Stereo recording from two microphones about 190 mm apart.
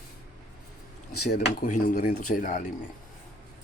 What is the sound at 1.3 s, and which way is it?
Speech, 60° left (ahead or behind).